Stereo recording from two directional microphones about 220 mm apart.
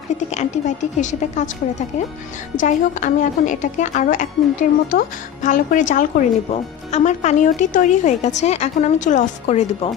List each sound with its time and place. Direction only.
0.3 s a woman's voice: 30° left (ahead or behind)